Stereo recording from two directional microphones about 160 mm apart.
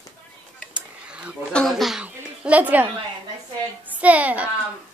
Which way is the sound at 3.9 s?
10° right (ahead or behind).